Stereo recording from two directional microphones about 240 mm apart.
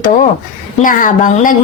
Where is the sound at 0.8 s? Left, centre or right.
Left.